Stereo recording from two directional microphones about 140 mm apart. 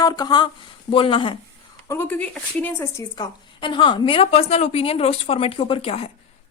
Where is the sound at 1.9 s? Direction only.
15° left (ahead or behind).